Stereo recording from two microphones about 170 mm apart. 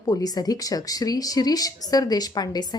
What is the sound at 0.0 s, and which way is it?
A woman's voice, 20° left (ahead or behind).